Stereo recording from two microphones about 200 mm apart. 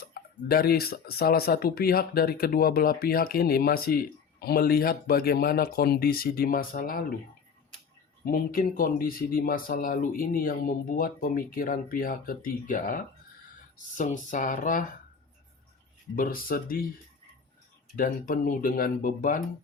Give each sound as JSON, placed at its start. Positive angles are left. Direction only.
{"t": 0.0, "sound": "speech", "side_deg": 50}
{"t": 8.2, "sound": "speech", "side_deg": 45}
{"t": 16.1, "sound": "speech", "side_deg": 45}
{"t": 17.9, "sound": "speech", "side_deg": 45}